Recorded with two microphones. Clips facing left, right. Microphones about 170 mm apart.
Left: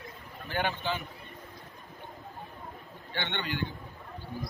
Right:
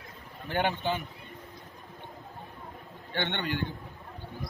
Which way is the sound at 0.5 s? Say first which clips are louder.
Right 3 dB; 55° right (ahead or behind).